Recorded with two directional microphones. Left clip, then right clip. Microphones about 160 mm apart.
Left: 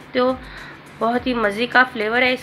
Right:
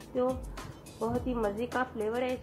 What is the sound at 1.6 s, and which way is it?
Speech, 5° left (ahead or behind).